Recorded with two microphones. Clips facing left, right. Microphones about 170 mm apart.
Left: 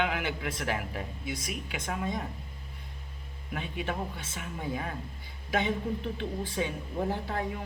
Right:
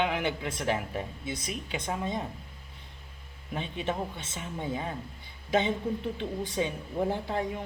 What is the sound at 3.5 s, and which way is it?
Speech, 25° right (ahead or behind).